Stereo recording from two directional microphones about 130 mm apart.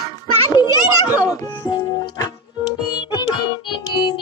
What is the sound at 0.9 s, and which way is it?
Music, 15° right (ahead or behind).